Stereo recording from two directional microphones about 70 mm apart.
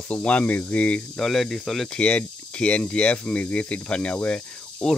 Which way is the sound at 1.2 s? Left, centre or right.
Centre.